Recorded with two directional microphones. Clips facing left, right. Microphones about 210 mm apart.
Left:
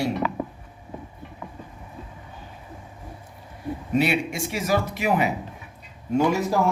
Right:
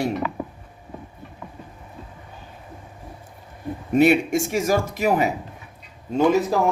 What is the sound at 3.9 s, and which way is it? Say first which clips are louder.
Speech: right 7 dB; 50° right (ahead or behind).